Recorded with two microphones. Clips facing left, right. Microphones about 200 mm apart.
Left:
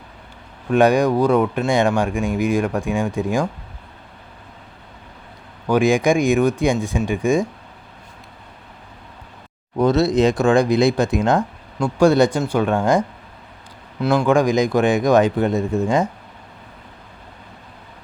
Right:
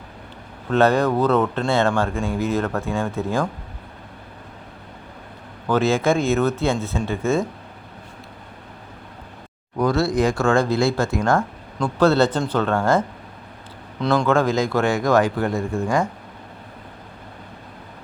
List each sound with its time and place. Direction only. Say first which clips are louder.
0.7 s speech: left 2 dB; 15° left (ahead or behind)
5.6 s speech: left 3 dB; 15° left (ahead or behind)
9.7 s speech: left 3 dB; 20° left (ahead or behind)